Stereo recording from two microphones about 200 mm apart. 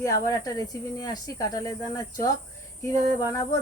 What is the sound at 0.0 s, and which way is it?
Speech, 15° left (ahead or behind).